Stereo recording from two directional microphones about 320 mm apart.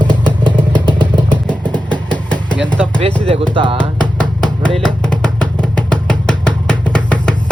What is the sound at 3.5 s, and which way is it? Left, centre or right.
Speech, centre.